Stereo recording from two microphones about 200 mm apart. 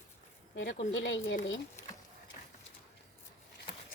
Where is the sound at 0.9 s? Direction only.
70° left (ahead or behind).